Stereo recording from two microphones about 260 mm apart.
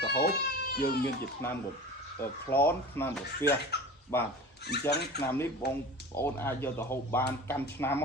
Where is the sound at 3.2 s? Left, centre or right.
Left.